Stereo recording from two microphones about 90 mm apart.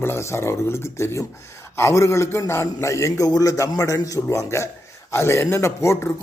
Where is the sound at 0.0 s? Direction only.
30° left (ahead or behind).